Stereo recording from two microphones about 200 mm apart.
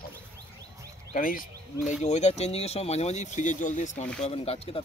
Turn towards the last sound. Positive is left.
turn(degrees=30)  # may be behind; listen again after turning